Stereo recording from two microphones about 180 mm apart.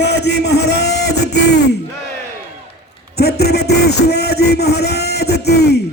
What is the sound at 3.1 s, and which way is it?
A man's voice, 60° left (ahead or behind).